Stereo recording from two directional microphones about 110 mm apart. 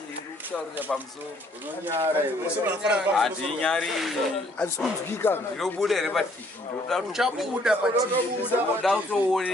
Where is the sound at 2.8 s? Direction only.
5° right (ahead or behind).